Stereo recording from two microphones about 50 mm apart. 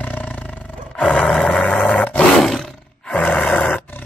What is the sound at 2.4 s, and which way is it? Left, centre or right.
Roar, centre.